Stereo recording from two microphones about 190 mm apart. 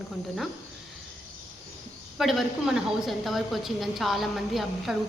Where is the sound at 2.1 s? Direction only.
Centre (ahead or behind).